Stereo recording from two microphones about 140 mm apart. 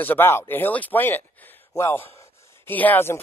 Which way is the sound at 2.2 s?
15° left (ahead or behind).